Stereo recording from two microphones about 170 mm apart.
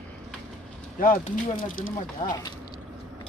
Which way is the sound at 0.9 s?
55° left (ahead or behind).